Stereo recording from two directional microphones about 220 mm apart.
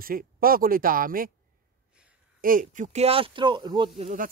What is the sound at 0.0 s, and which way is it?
Speech, 40° right (ahead or behind).